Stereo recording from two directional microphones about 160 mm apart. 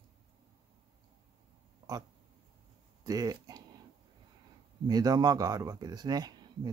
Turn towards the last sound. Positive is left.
turn(degrees=-25)  # may be behind; listen again after turning